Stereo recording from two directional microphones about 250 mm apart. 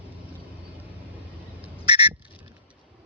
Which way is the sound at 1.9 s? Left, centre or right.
Centre.